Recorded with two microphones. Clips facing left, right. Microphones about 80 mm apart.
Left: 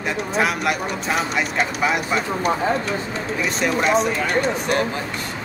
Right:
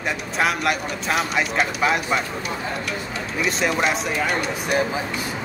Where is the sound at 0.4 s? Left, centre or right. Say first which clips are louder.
Even; centre.